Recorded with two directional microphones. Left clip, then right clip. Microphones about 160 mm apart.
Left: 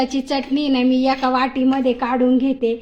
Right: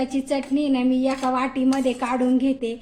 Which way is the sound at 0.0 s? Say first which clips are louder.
Left 4 dB; 35° left (ahead or behind).